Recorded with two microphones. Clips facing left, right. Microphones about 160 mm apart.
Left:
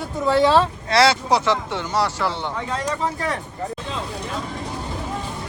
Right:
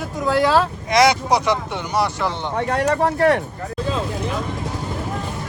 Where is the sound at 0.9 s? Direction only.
15° right (ahead or behind).